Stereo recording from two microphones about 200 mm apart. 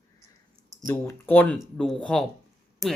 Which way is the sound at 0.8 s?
15° left (ahead or behind).